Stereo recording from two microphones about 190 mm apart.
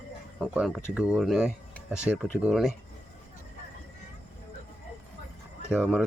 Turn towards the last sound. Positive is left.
turn(degrees=0)  # may be behind; listen again after turning